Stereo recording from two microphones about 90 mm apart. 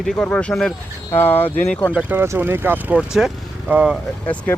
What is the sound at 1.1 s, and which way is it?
Speech, 25° left (ahead or behind).